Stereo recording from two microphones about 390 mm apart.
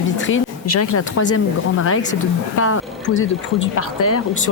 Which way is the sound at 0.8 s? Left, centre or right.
Left.